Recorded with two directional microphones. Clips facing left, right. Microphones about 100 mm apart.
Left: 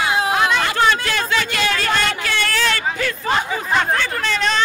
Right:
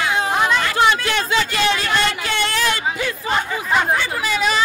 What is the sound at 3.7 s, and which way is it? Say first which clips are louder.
Hubbub: right 1 dB; 10° right (ahead or behind).